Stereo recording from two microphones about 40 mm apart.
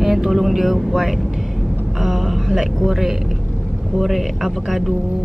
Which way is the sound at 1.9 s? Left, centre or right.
Centre.